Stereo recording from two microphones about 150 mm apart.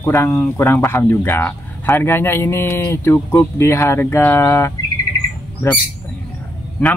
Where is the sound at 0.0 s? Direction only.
15° left (ahead or behind).